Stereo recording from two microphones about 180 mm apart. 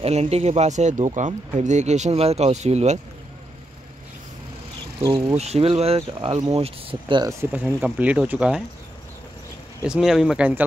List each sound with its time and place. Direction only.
0.0 s speech: 35° right (ahead or behind)
5.0 s speech: 30° right (ahead or behind); by 8.6 s 5° right (ahead or behind)
9.8 s speech: 5° right (ahead or behind)